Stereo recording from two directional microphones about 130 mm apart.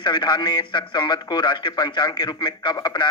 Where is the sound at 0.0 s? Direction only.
35° left (ahead or behind).